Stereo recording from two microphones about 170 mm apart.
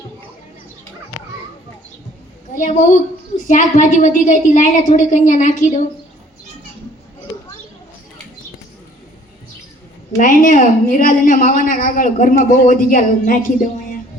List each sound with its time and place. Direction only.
2.6 s a woman's voice: 45° left (ahead or behind)
10.2 s a woman's voice: 50° left (ahead or behind)